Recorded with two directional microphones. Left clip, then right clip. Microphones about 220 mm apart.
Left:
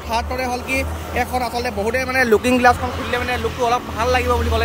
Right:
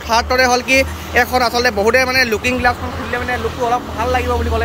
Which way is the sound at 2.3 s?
35° left (ahead or behind).